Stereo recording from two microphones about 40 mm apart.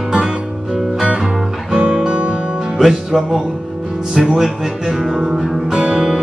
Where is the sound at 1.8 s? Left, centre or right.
Right.